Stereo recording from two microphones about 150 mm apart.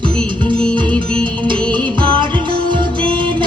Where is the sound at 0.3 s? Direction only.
35° right (ahead or behind).